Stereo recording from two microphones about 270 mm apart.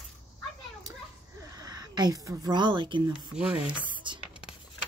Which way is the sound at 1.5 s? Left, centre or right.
Centre.